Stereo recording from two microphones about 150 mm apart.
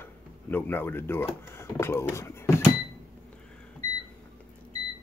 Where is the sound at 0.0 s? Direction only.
15° left (ahead or behind).